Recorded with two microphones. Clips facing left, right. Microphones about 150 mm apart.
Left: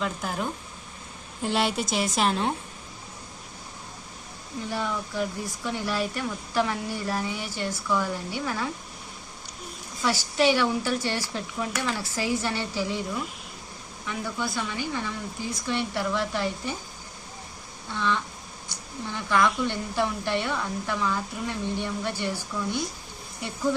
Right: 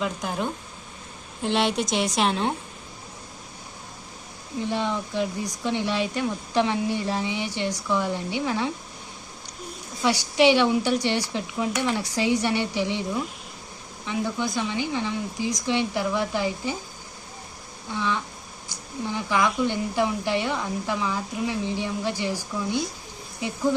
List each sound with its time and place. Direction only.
0.0 s a woman's voice: centre (ahead or behind)
4.7 s speech: 20° right (ahead or behind)
10.0 s speech: 15° right (ahead or behind)
14.0 s a woman's voice: 20° right (ahead or behind)
17.9 s a woman's voice: 15° right (ahead or behind)